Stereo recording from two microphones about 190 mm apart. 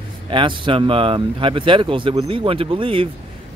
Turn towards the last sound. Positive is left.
turn(degrees=-30)  # may be behind; listen again after turning